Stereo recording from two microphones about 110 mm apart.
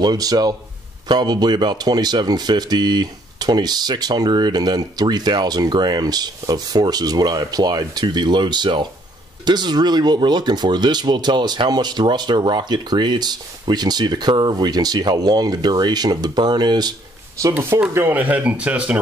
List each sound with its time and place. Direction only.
0.0 s speech: 35° right (ahead or behind)
17.4 s speech: 25° right (ahead or behind)